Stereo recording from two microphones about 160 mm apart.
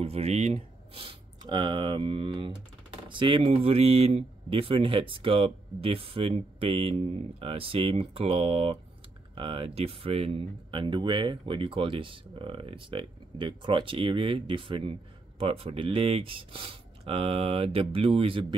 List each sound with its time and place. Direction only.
0.0 s speech: 40° right (ahead or behind)